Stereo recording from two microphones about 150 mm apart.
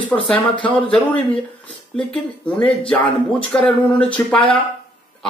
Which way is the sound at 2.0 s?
5° left (ahead or behind).